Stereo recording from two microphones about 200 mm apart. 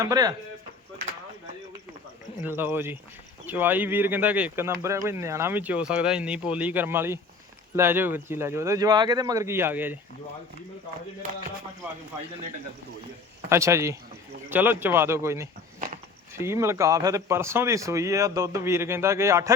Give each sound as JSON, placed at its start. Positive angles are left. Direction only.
{"t": 0.0, "sound": "speech", "side_deg": -15}
{"t": 2.4, "sound": "speech", "side_deg": -10}
{"t": 13.5, "sound": "speech", "side_deg": -15}